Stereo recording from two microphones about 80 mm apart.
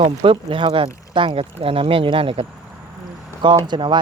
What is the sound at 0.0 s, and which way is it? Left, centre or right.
Speech, right.